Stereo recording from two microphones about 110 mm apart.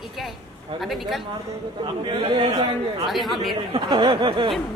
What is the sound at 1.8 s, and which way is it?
Speech, 50° right (ahead or behind).